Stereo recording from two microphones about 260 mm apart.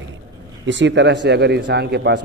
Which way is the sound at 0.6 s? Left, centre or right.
Right.